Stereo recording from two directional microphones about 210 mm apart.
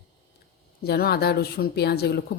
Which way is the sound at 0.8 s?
50° left (ahead or behind).